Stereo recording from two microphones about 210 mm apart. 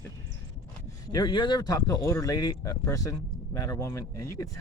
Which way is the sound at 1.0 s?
20° left (ahead or behind).